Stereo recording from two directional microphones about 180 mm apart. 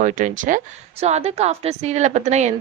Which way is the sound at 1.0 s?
35° right (ahead or behind).